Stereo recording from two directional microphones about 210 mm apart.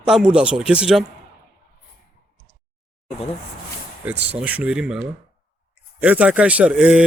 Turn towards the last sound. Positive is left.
turn(degrees=-5)  # may be behind; listen again after turning